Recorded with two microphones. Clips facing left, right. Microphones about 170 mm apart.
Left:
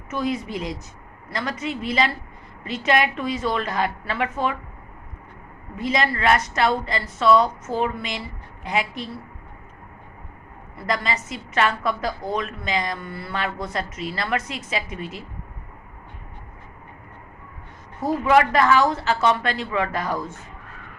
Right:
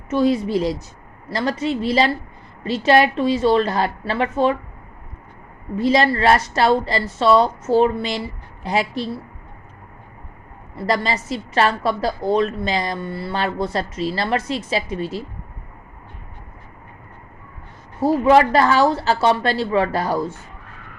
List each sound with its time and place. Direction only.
0.1 s a woman's voice: 30° right (ahead or behind)
5.7 s a woman's voice: 35° right (ahead or behind)
10.8 s a woman's voice: 35° right (ahead or behind)
18.0 s a woman's voice: 30° right (ahead or behind)